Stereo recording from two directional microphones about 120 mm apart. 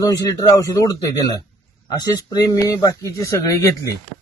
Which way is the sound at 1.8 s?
35° left (ahead or behind).